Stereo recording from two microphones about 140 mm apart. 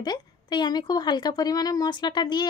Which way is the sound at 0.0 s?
30° left (ahead or behind).